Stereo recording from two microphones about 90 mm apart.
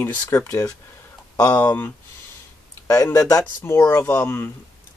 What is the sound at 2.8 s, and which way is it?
Speech, 40° left (ahead or behind).